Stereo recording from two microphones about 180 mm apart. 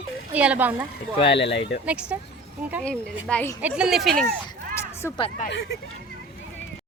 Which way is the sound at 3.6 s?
5° right (ahead or behind).